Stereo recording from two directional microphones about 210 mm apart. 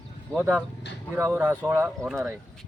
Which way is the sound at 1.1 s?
10° right (ahead or behind).